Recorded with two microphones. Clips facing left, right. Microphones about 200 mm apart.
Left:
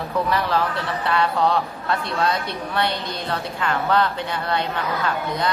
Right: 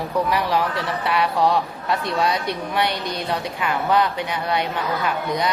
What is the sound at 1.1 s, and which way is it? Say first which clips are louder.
A woman's voice: even; 15° right (ahead or behind).